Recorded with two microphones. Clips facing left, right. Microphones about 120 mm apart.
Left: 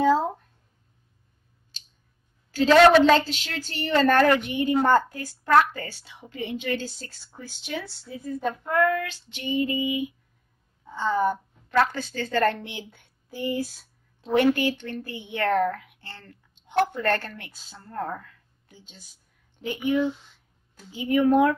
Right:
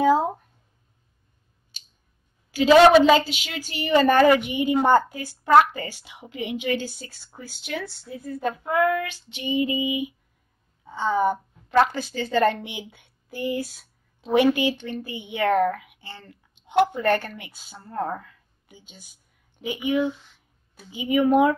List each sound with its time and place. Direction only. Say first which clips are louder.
0.0 s a woman's voice: right 2 dB; 15° right (ahead or behind)
2.5 s a woman's voice: right 2 dB; 10° right (ahead or behind)